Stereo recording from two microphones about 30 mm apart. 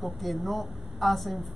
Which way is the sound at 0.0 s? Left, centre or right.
Centre.